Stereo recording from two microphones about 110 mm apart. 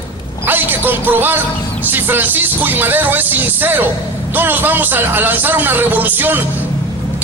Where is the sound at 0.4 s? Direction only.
20° right (ahead or behind).